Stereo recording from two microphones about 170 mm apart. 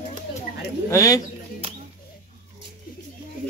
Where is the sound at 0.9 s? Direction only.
20° left (ahead or behind).